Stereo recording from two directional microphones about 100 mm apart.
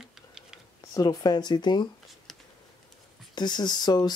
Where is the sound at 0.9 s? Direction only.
40° left (ahead or behind).